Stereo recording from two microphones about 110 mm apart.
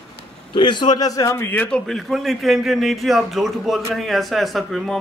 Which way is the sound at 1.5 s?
10° left (ahead or behind).